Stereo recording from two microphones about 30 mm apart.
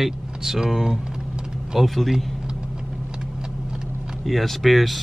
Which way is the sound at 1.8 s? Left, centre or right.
Centre.